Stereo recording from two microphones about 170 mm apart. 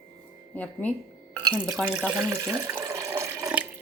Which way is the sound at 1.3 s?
25° right (ahead or behind).